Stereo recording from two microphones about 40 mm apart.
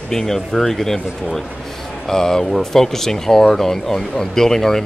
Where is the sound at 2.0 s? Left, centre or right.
Centre.